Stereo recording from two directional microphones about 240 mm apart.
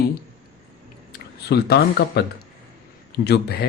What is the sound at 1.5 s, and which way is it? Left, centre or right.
Speech, left.